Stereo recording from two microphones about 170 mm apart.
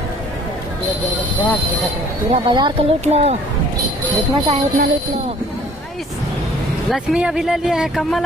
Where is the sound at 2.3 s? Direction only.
25° right (ahead or behind).